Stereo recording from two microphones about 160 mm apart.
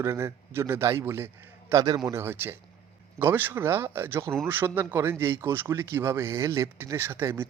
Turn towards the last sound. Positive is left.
turn(degrees=-15)  # may be behind; listen again after turning